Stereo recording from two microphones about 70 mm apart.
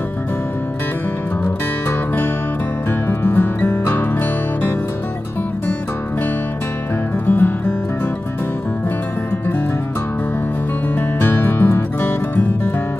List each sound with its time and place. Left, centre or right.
1.4 s music: left
7.2 s music: left
11.1 s music: left